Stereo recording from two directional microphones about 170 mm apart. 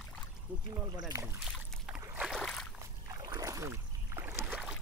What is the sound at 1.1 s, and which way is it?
Speech, 20° right (ahead or behind).